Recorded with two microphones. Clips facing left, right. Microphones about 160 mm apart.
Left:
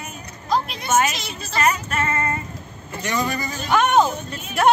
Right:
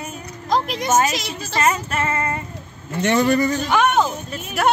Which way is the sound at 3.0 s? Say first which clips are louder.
Right 8 dB; 70° right (ahead or behind).